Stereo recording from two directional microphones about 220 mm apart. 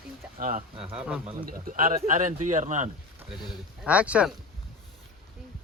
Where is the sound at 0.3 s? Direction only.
35° right (ahead or behind).